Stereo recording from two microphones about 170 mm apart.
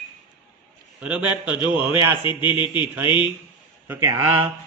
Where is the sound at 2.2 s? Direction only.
30° left (ahead or behind).